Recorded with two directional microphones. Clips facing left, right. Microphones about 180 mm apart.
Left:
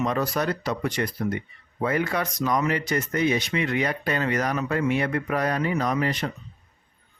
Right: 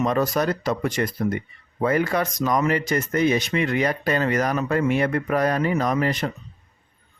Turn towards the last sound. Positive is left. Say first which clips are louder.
# right 3 dB
turn(degrees=-45)  # may be behind; listen again after turning